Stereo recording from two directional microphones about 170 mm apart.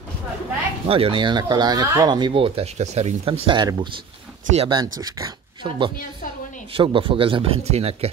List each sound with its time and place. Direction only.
0.8 s speech: 30° right (ahead or behind)